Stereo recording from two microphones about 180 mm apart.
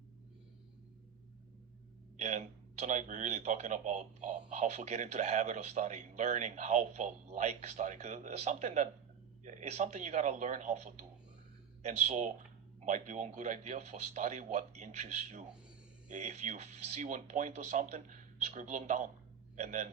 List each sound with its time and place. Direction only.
2.1 s a man's voice: 40° right (ahead or behind)